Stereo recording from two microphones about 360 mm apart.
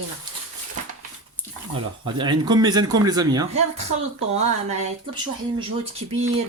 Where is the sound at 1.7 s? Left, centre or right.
Centre.